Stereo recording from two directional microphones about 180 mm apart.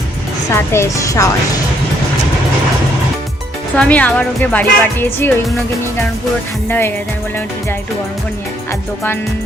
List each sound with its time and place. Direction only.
0.5 s speech: 15° left (ahead or behind)
3.8 s speech: 10° left (ahead or behind)
6.7 s speech: 10° left (ahead or behind)